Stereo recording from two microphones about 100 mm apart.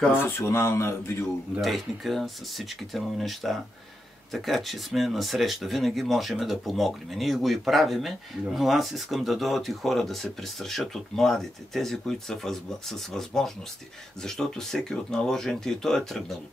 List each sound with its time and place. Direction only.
0.1 s speech: 25° left (ahead or behind)
1.6 s speech: centre (ahead or behind)